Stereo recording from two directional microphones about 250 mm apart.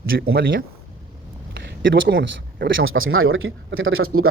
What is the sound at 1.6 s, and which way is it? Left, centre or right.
Speech, right.